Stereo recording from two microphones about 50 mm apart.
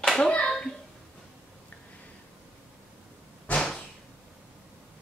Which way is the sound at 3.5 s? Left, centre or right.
Left.